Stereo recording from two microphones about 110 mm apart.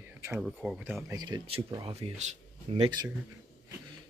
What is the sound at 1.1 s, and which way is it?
Speech, 35° right (ahead or behind).